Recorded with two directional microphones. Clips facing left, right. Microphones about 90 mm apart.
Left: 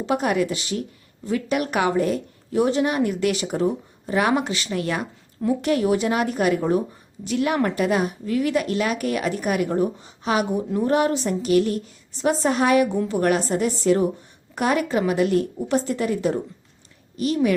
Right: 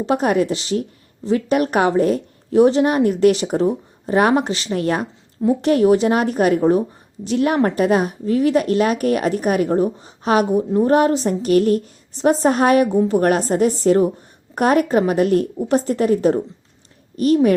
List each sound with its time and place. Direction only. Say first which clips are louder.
0.0 s a woman's voice: right 4 dB; 35° right (ahead or behind)